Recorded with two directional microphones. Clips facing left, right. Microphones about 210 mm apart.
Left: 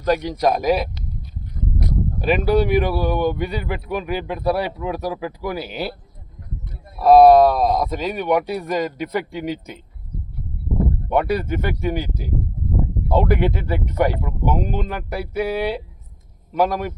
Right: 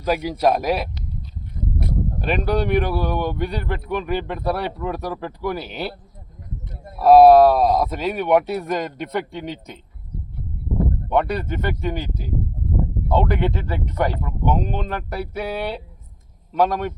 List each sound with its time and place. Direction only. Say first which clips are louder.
0.0 s speech: left 1 dB; 5° right (ahead or behind)
2.2 s speech: left 4 dB; 5° left (ahead or behind)
7.0 s speech: even; 5° right (ahead or behind)
11.1 s a man's voice: left 2 dB; 5° left (ahead or behind)